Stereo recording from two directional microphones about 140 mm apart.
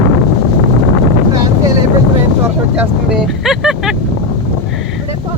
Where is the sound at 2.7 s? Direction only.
5° right (ahead or behind).